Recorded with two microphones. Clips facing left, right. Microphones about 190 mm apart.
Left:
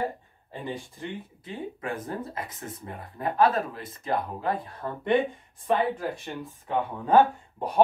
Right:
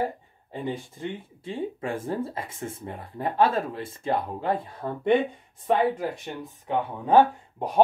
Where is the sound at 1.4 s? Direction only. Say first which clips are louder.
Right 6 dB; 30° right (ahead or behind).